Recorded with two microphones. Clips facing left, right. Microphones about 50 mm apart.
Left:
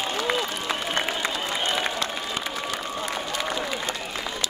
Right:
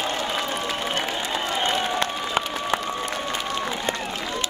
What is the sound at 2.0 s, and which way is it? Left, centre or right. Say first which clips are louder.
Applause: right 4 dB; right.